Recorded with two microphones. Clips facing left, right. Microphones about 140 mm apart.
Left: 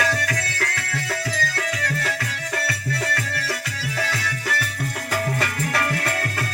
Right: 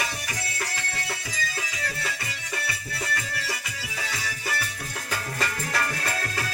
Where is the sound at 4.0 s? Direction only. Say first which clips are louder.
Left 5 dB; 80° left.